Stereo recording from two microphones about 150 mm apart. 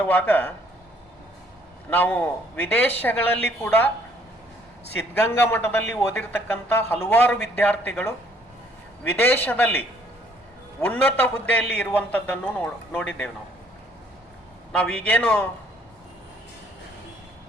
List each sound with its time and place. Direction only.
0.0 s a man's voice: 10° left (ahead or behind)
1.9 s a man's voice: 10° left (ahead or behind)
5.2 s a man's voice: 15° left (ahead or behind)
14.7 s a man's voice: 10° left (ahead or behind)